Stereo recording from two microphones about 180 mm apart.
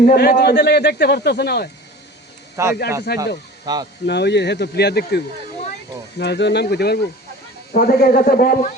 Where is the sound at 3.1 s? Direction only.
60° left (ahead or behind).